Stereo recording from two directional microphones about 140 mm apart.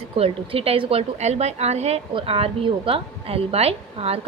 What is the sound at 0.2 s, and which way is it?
Speech, 40° right (ahead or behind).